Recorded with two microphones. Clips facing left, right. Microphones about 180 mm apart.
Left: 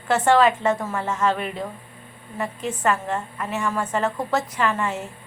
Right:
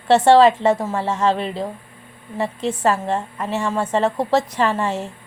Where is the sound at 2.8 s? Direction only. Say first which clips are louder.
Right 3 dB; 30° right (ahead or behind).